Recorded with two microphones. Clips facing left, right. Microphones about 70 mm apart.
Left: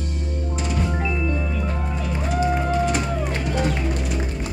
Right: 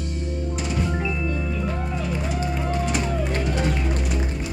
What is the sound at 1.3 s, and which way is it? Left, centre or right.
Music, left.